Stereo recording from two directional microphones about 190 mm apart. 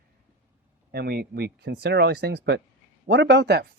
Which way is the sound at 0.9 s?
55° right (ahead or behind).